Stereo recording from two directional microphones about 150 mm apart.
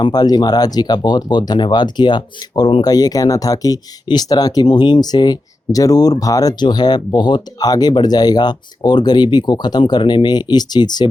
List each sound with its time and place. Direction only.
0.0 s speech: 25° left (ahead or behind)